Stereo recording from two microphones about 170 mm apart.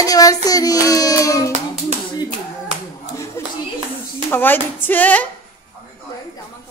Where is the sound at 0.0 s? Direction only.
20° left (ahead or behind).